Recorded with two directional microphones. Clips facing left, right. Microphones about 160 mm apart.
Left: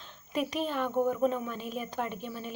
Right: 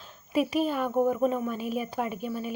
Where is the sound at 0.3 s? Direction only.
5° right (ahead or behind).